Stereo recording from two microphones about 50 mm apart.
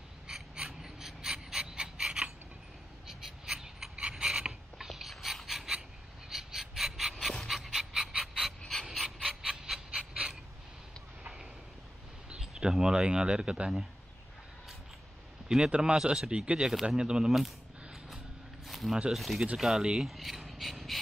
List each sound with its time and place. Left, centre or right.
0.3 s gasp: centre
3.1 s a sound: centre
7.4 s dog: centre
8.4 s mechanisms: centre
12.3 s speech: centre
15.4 s speech: centre
18.7 s a sound: centre
19.1 s speech: centre
19.5 s speech: centre
20.1 s mechanisms: centre